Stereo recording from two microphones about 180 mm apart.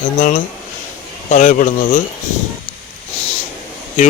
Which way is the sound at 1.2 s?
45° left (ahead or behind).